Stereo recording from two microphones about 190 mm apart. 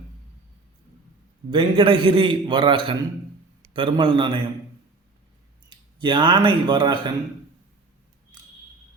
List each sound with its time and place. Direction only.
1.5 s a man's voice: 25° right (ahead or behind)
5.6 s speech: 25° right (ahead or behind)